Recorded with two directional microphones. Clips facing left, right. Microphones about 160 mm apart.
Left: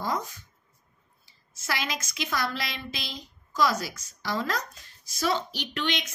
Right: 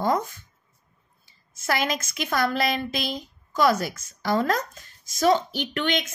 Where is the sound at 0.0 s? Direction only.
55° right (ahead or behind).